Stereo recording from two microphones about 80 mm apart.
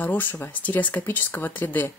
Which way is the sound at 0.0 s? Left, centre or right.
Left.